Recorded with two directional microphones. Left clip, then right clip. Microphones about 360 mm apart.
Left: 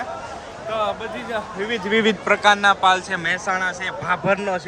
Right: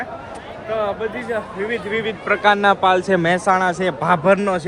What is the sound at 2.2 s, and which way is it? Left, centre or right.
Speech, centre.